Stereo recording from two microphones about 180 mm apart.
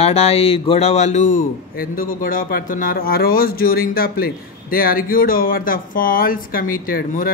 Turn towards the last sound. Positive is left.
turn(degrees=50)  # may be behind; listen again after turning